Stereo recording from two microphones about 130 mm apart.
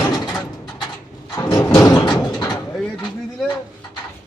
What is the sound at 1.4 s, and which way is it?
Sliding door, 25° left (ahead or behind).